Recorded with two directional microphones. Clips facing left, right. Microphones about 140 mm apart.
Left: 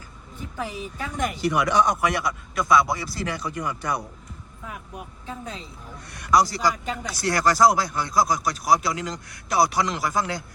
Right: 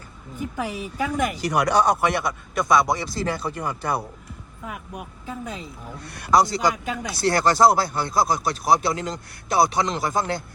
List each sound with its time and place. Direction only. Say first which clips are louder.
0.3 s a woman's voice: right 4 dB; 10° right (ahead or behind)
1.4 s speech: left 1 dB; 40° right (ahead or behind)
4.6 s speech: right 3 dB; 5° right (ahead or behind)
6.0 s speech: right 1 dB; 30° right (ahead or behind)